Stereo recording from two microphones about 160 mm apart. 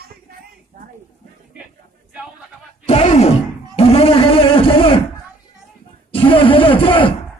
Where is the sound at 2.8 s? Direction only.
45° left (ahead or behind).